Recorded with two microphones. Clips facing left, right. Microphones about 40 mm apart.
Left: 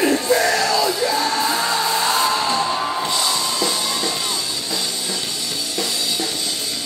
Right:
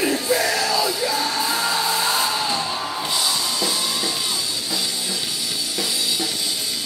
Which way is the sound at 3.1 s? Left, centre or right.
Centre.